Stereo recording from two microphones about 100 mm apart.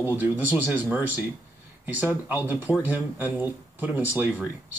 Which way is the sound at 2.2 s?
15° right (ahead or behind).